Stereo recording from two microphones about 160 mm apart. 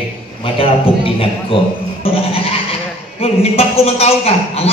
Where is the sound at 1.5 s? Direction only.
35° left (ahead or behind).